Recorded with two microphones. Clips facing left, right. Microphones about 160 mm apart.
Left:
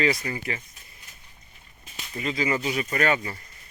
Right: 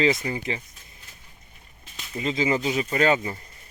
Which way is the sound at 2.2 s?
25° right (ahead or behind).